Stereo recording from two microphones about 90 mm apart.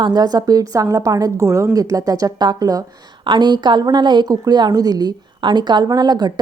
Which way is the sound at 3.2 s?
55° right (ahead or behind).